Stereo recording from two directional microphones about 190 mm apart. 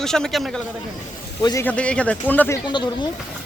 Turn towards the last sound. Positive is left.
turn(degrees=25)  # may be behind; listen again after turning